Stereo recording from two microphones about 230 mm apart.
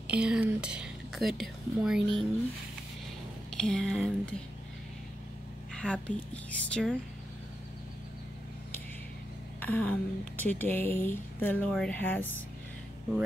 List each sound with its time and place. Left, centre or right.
0.0 s speech: centre
3.5 s a woman's voice: centre
5.8 s a woman's voice: centre
9.6 s speech: centre